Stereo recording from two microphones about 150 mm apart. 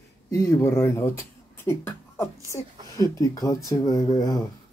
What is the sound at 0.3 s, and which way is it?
Speech, 20° left (ahead or behind).